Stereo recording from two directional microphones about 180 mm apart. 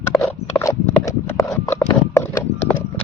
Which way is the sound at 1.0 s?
15° left (ahead or behind).